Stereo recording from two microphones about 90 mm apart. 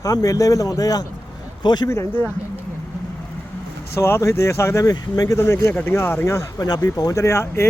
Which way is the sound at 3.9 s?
30° left (ahead or behind).